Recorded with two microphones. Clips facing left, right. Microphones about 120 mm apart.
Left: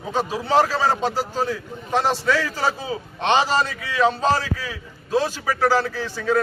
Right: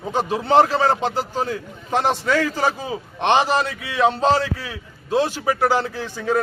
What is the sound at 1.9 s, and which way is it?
A man's voice, 15° right (ahead or behind).